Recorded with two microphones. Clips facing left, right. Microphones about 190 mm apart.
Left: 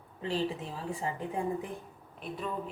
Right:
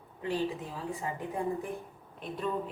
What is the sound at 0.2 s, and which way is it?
Speech, 25° left (ahead or behind).